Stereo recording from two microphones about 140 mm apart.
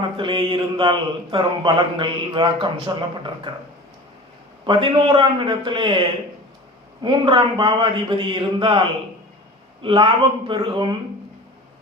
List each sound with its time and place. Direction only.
0.2 s speech: 35° right (ahead or behind)
4.6 s speech: 35° right (ahead or behind)
9.8 s speech: 35° right (ahead or behind)